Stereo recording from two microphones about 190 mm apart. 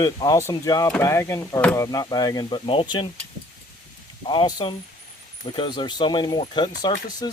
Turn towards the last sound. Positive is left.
turn(degrees=20)  # may be behind; listen again after turning